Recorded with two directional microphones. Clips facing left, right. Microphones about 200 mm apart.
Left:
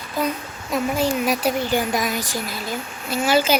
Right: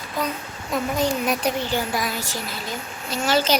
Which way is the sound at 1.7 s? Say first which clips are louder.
Left 3 dB; 15° left (ahead or behind).